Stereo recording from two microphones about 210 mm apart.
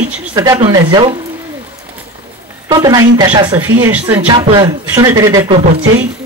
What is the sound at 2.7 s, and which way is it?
A man's voice, 20° right (ahead or behind).